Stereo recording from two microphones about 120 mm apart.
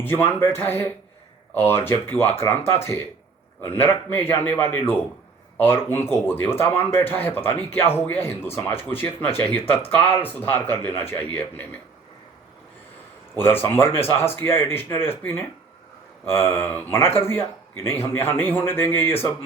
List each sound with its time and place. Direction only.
0.0 s speech: 20° left (ahead or behind)
13.4 s speech: 20° left (ahead or behind)